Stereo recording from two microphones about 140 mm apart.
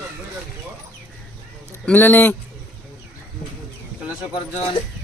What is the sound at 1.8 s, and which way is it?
Speech, 15° left (ahead or behind).